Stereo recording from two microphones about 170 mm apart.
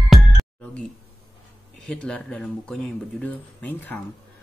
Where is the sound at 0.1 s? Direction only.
Centre (ahead or behind).